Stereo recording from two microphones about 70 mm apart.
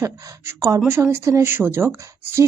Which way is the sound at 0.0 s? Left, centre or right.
Right.